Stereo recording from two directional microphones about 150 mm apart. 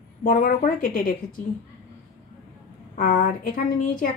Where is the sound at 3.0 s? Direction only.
75° left (ahead or behind).